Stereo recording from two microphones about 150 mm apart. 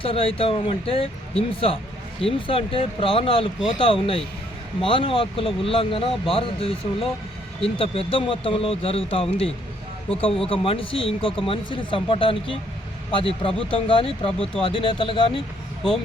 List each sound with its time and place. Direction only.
0.0 s speech: 35° left (ahead or behind)